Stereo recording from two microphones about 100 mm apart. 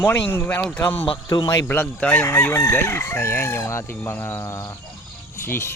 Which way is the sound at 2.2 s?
25° left (ahead or behind).